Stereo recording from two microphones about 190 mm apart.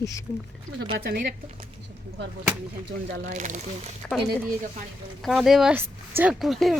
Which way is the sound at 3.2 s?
40° right (ahead or behind).